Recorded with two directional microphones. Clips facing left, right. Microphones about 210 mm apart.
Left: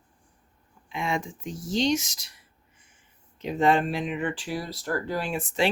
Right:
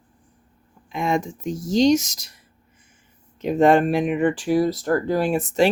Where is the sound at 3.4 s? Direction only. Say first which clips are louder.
Right 7 dB; 50° right (ahead or behind).